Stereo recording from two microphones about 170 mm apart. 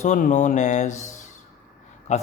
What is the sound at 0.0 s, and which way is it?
Speech, 45° left (ahead or behind).